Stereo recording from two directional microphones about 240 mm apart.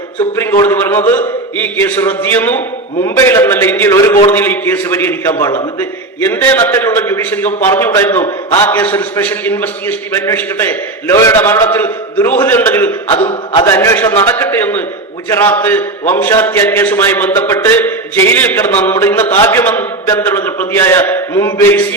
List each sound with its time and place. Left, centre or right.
0.3 s a man's voice: centre
8.2 s a man's voice: centre
8.7 s a man's voice: centre
13.1 s a man's voice: centre